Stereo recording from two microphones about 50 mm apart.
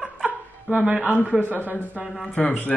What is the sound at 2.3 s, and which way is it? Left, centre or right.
Speech, left.